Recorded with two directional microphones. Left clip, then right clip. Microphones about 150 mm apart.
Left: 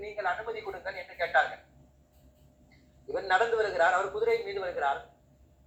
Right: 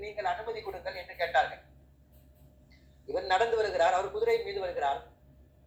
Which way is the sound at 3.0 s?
20° right (ahead or behind).